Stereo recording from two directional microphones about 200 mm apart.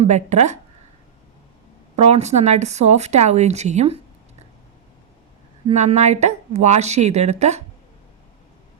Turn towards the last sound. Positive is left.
turn(degrees=-35)  # may be behind; listen again after turning